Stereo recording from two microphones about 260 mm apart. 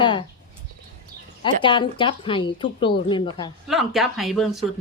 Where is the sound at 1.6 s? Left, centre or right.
Centre.